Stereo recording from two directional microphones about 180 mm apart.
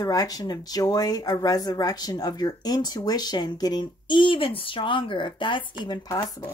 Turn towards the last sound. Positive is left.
turn(degrees=20)  # may be behind; listen again after turning